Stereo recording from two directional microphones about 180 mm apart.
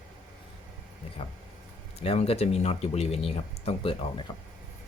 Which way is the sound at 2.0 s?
35° left (ahead or behind).